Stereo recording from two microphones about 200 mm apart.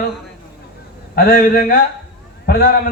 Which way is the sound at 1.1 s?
45° left (ahead or behind).